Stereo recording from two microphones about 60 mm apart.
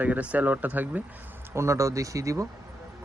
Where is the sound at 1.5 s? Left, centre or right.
Right.